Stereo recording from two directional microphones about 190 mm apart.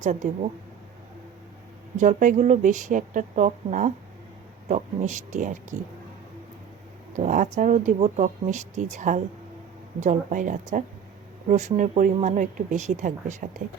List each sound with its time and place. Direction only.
0.0 s speech: 40° right (ahead or behind)
2.0 s speech: 40° right (ahead or behind)
7.2 s speech: 40° right (ahead or behind)